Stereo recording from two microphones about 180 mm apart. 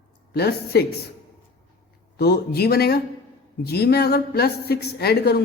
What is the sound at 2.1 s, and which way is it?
A woman's voice, 60° left (ahead or behind).